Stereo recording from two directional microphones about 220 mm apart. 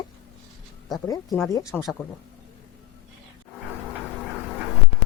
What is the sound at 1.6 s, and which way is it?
Speech, centre (ahead or behind).